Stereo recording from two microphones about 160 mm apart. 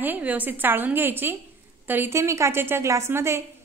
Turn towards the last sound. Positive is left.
turn(degrees=-15)  # may be behind; listen again after turning